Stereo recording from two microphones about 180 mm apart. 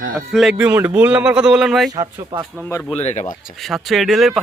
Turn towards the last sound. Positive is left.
turn(degrees=0)  # may be behind; listen again after turning